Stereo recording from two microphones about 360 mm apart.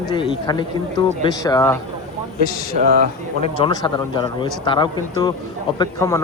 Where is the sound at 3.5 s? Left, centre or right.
Centre.